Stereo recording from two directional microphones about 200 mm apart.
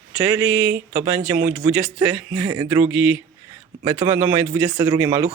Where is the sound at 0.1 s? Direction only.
5° right (ahead or behind).